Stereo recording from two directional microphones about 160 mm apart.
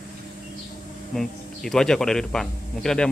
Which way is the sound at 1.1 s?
Centre (ahead or behind).